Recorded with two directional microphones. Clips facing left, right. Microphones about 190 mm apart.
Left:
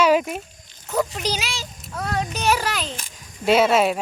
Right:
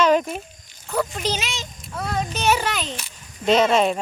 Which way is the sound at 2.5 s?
Centre (ahead or behind).